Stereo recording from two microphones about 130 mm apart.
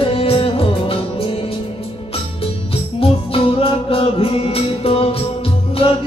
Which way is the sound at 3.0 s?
45° left (ahead or behind).